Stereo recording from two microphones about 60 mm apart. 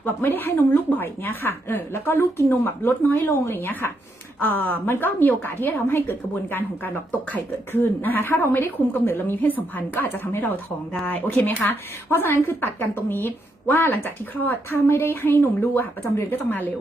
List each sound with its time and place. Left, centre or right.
0.0 s a woman's voice: left